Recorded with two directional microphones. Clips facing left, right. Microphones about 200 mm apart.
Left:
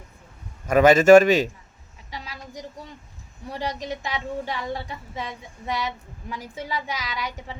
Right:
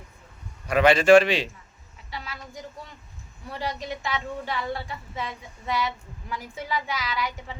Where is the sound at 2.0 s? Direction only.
20° left (ahead or behind).